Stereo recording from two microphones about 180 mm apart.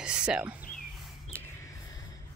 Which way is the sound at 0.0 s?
5° right (ahead or behind).